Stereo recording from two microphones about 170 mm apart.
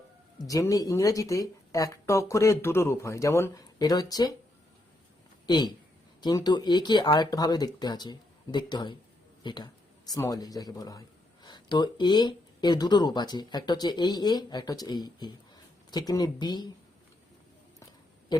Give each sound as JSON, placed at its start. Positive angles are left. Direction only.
{"t": 0.4, "sound": "speech", "side_deg": 20}
{"t": 5.5, "sound": "speech", "side_deg": 25}